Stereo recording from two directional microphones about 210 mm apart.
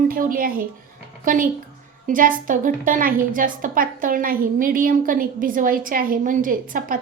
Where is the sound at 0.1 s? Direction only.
40° right (ahead or behind).